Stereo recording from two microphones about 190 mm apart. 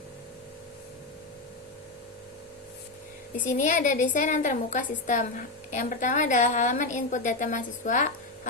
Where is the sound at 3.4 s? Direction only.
40° left (ahead or behind).